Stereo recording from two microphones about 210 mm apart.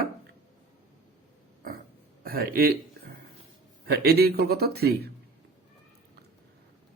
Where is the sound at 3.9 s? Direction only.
50° right (ahead or behind).